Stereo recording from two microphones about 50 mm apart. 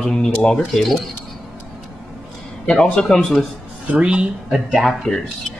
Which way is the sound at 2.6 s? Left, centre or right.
Centre.